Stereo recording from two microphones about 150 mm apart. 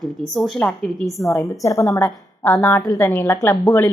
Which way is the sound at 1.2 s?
20° left (ahead or behind).